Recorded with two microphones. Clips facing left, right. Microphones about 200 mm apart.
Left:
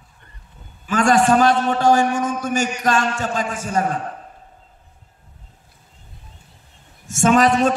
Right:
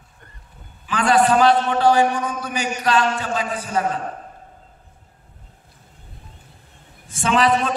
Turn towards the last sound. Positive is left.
turn(degrees=45)  # may be behind; listen again after turning